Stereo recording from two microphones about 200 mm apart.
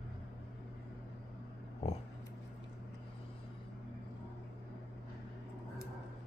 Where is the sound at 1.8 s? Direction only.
30° left (ahead or behind).